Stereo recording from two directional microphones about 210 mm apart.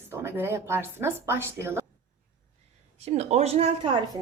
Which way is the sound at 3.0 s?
30° right (ahead or behind).